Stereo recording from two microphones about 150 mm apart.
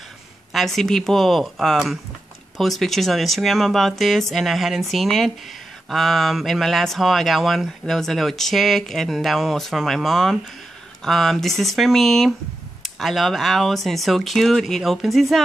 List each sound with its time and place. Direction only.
0.5 s speech: centre (ahead or behind)